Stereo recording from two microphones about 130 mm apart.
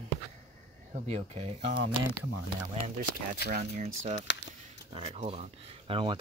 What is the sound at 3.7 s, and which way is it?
Speech, 90° right.